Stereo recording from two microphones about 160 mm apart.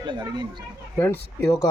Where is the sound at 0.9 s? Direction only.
15° left (ahead or behind).